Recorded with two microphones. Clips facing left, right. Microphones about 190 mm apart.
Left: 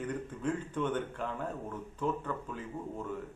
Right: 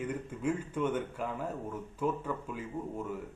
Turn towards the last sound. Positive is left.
turn(degrees=-10)  # may be behind; listen again after turning